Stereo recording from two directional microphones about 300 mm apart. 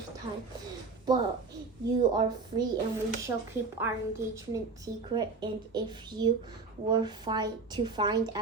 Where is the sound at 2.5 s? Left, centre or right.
Centre.